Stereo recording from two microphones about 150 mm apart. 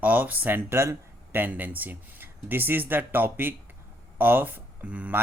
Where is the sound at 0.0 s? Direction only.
10° right (ahead or behind).